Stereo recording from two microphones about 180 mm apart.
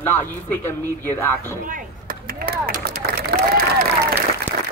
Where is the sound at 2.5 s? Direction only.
55° right (ahead or behind).